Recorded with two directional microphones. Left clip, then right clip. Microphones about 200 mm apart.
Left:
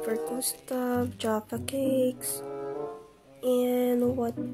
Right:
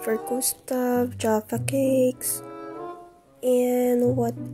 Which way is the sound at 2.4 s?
Centre (ahead or behind).